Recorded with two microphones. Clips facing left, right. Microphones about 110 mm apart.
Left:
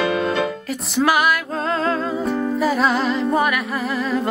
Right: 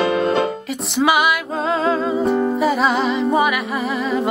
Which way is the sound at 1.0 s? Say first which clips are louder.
Right 1 dB; centre (ahead or behind).